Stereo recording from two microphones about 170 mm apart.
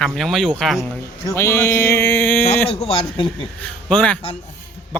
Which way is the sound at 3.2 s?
5° left (ahead or behind).